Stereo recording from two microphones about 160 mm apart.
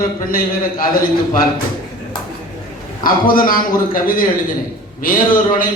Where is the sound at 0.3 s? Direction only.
65° left (ahead or behind).